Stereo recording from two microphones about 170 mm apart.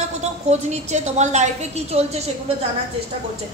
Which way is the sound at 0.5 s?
40° right (ahead or behind).